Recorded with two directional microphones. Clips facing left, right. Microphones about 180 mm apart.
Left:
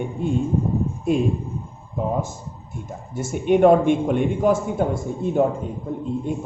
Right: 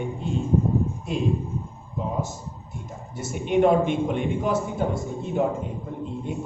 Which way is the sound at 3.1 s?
50° left (ahead or behind).